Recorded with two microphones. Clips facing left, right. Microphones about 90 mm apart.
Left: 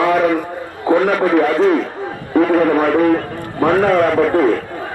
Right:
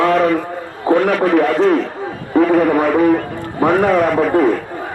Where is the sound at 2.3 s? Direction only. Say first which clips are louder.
Even; 20° right (ahead or behind).